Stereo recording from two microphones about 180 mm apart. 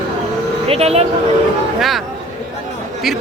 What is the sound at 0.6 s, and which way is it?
Speech, 35° right (ahead or behind).